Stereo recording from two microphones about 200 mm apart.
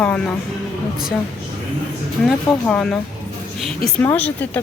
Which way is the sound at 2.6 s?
5° left (ahead or behind).